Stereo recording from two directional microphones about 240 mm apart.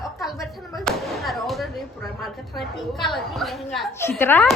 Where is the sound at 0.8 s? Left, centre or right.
Centre.